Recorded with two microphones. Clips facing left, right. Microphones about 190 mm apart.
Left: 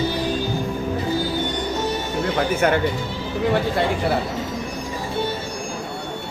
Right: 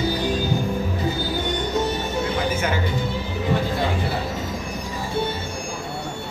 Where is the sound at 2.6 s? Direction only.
60° left (ahead or behind).